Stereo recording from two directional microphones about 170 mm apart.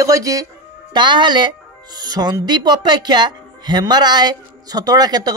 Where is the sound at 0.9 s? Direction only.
25° right (ahead or behind).